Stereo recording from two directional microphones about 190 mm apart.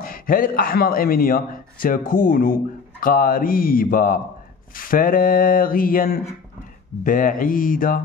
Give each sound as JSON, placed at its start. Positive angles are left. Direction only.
{"t": 0.0, "sound": "a man's voice", "side_deg": 50}